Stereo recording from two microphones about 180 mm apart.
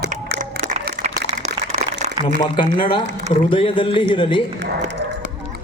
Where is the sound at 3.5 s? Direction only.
30° left (ahead or behind).